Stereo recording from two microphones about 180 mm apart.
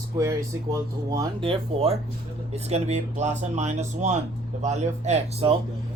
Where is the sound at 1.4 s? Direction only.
30° right (ahead or behind).